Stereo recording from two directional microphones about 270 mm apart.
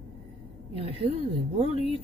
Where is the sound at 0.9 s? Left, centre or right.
Right.